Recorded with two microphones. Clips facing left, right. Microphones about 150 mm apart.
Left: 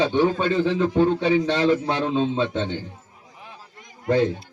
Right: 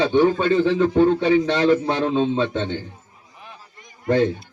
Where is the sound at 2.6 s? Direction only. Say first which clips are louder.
Right 1 dB; 30° left (ahead or behind).